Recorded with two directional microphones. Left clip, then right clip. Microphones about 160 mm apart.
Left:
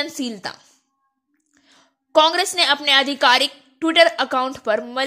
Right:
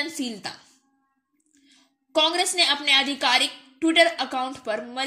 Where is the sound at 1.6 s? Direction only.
50° left (ahead or behind).